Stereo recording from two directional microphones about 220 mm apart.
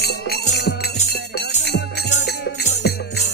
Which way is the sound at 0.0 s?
50° left (ahead or behind).